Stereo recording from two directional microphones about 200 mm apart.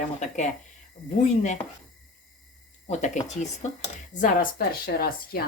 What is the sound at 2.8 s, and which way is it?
A woman's voice, 35° left (ahead or behind).